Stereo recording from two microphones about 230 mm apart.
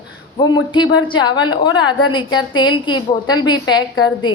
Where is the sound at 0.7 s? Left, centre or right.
Centre.